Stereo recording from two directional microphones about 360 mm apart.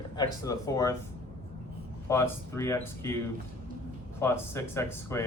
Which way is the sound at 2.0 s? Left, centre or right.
Centre.